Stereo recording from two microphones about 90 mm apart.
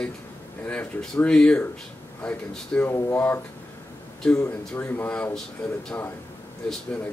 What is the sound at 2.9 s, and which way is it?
Speech, 25° left (ahead or behind).